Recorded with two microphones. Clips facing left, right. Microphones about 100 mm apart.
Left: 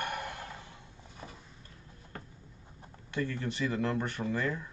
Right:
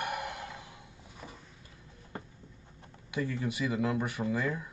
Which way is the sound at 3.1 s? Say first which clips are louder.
Right 1 dB; 10° right (ahead or behind).